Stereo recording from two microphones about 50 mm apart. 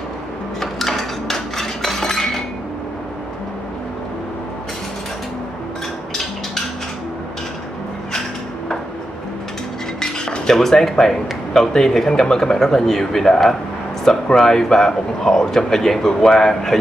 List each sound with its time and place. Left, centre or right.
0.6 s dishes: centre
9.9 s speech: centre